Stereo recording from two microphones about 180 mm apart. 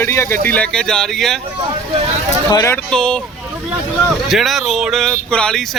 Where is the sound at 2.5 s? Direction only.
20° left (ahead or behind).